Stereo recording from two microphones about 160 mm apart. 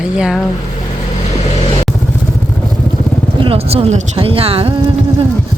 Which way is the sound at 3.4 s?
35° right (ahead or behind).